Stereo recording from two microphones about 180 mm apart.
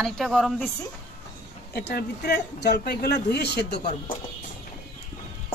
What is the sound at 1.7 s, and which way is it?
A man's voice, 65° left (ahead or behind).